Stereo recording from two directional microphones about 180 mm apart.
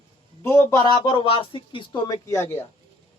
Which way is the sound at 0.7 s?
25° left (ahead or behind).